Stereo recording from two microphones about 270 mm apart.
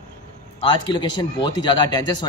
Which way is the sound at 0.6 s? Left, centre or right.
Centre.